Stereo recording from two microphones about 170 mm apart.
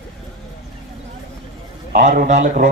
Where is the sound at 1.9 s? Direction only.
50° right (ahead or behind).